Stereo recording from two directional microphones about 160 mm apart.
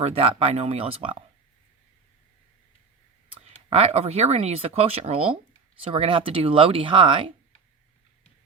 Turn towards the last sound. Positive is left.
turn(degrees=-35)  # may be behind; listen again after turning